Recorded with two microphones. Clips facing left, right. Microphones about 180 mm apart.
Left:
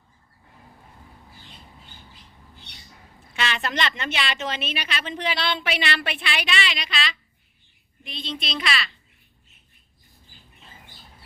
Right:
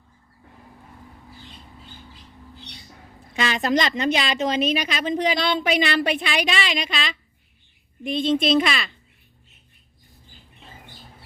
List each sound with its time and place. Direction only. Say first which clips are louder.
3.6 s a woman's voice: right 7 dB; 35° right (ahead or behind)